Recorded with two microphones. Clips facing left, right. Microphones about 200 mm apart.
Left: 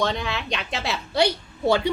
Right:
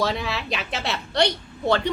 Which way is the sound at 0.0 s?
5° right (ahead or behind).